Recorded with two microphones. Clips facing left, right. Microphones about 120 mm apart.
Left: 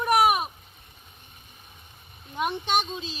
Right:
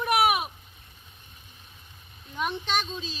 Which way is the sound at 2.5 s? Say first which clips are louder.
Left 3 dB; 15° left (ahead or behind).